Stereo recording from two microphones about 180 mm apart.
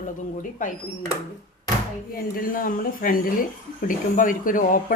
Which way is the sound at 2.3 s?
50° left (ahead or behind).